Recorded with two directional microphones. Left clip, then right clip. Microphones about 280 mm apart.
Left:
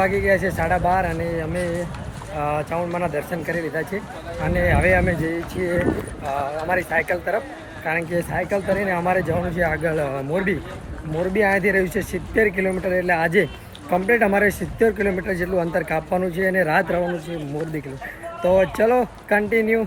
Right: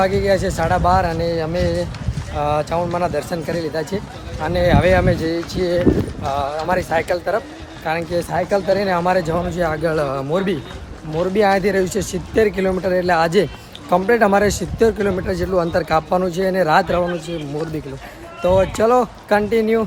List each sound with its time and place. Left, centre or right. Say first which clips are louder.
0.0 s speech: right 2 dB; centre
18.4 s speech: right 2 dB; centre